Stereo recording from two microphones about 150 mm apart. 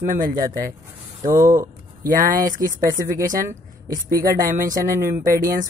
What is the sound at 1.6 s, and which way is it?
Speech, 65° right (ahead or behind).